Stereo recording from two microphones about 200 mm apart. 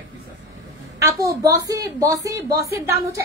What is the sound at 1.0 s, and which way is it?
A woman's voice, 15° right (ahead or behind).